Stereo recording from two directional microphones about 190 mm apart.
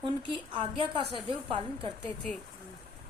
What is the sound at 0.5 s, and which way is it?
A woman's voice, 25° right (ahead or behind).